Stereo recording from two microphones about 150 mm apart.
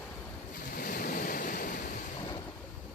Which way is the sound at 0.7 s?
75° left (ahead or behind).